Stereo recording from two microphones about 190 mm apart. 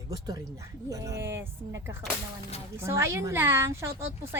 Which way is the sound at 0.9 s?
15° right (ahead or behind).